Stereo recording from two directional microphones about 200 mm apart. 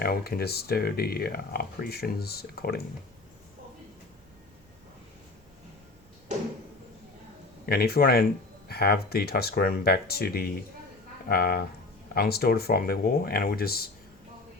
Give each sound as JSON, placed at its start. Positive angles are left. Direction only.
{"t": 0.0, "sound": "speech", "side_deg": 50}
{"t": 7.7, "sound": "speech", "side_deg": 50}